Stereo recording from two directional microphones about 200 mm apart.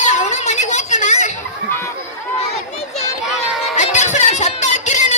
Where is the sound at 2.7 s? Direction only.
35° left (ahead or behind).